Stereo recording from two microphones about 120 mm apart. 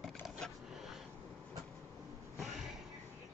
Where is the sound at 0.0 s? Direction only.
Centre (ahead or behind).